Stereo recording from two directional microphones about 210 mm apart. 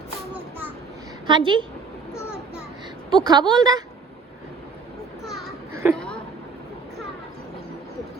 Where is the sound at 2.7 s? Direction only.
20° right (ahead or behind).